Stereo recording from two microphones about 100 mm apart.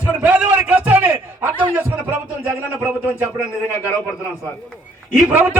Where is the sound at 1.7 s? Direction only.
15° right (ahead or behind).